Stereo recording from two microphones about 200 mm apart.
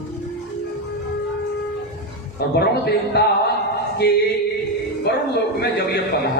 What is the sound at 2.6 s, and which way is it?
Speech, 55° left (ahead or behind).